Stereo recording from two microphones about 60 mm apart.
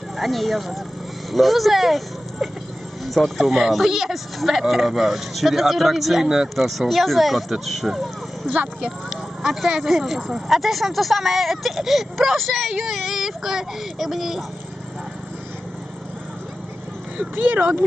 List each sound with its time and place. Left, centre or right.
0.2 s speech: centre
3.0 s speech: centre
17.3 s speech: right